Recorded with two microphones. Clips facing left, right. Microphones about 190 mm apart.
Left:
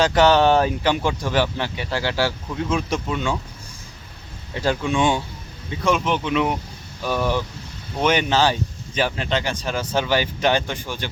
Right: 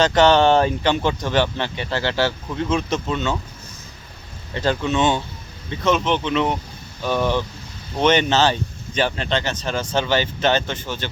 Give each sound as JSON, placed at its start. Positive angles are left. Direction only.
{"t": 0.0, "sound": "speech", "side_deg": 5}
{"t": 4.5, "sound": "speech", "side_deg": 10}